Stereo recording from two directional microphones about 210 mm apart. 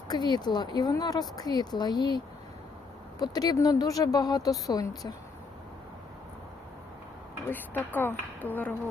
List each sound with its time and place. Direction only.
0.1 s speech: 20° left (ahead or behind)
7.5 s speech: 10° left (ahead or behind)